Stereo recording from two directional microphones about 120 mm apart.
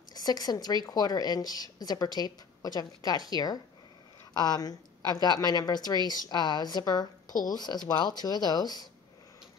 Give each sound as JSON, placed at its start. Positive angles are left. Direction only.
{"t": 0.1, "sound": "a woman's voice", "side_deg": 35}